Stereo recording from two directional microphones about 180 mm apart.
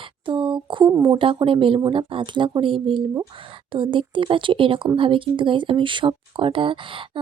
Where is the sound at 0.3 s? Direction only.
25° right (ahead or behind).